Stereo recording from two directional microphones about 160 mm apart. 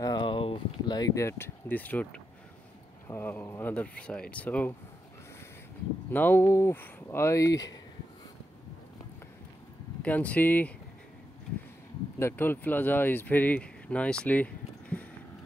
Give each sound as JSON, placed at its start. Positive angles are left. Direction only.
{"t": 0.0, "sound": "speech", "side_deg": 30}
{"t": 6.1, "sound": "speech", "side_deg": 15}
{"t": 10.0, "sound": "speech", "side_deg": 10}
{"t": 12.2, "sound": "speech", "side_deg": 15}